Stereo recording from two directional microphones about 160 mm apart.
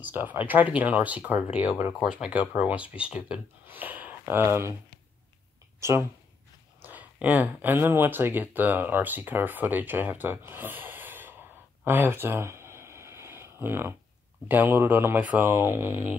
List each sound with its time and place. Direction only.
0.0 s speech: 10° right (ahead or behind)
5.8 s speech: 15° right (ahead or behind)
11.8 s a sound: 15° right (ahead or behind)
14.5 s speech: 10° right (ahead or behind)